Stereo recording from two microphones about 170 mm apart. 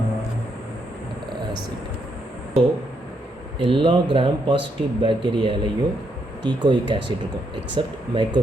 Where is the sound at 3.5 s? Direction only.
30° right (ahead or behind).